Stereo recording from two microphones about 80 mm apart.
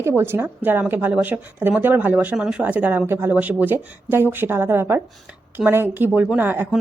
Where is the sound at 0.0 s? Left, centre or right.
Right.